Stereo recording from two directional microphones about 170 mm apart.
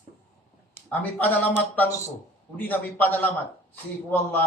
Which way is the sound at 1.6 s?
15° left (ahead or behind).